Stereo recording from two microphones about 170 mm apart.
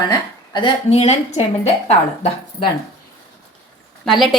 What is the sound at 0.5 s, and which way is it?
Speech, 35° left (ahead or behind).